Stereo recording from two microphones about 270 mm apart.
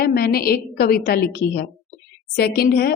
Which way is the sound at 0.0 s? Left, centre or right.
Left.